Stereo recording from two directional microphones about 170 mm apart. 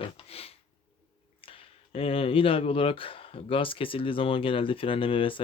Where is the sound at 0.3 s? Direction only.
35° left (ahead or behind).